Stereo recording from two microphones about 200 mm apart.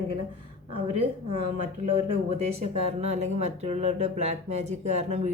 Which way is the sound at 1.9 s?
30° right (ahead or behind).